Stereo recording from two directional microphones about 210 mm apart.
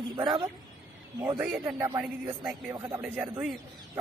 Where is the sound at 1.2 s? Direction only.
10° right (ahead or behind).